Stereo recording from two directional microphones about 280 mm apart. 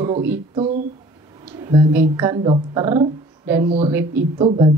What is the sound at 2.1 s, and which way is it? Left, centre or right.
A woman's voice, centre.